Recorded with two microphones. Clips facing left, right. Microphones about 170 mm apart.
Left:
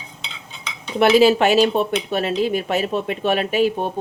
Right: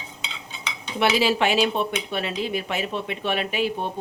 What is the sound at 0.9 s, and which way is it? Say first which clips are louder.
Speech: left 8 dB; 45° left (ahead or behind).